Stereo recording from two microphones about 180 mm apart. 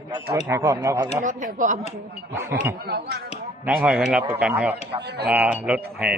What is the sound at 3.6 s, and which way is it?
Speech, 10° right (ahead or behind).